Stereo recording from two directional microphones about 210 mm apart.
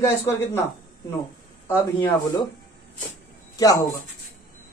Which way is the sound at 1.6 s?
15° left (ahead or behind).